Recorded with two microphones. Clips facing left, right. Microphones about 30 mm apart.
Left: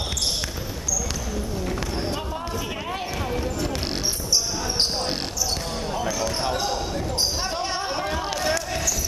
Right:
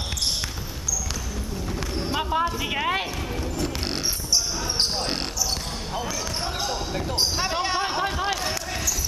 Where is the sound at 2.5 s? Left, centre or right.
Right.